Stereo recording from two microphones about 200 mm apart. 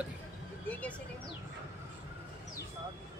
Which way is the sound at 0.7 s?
5° left (ahead or behind).